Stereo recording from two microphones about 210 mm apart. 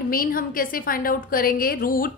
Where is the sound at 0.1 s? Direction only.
45° left (ahead or behind).